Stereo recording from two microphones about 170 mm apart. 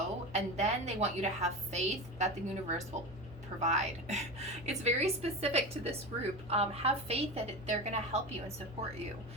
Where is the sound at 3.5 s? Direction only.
40° right (ahead or behind).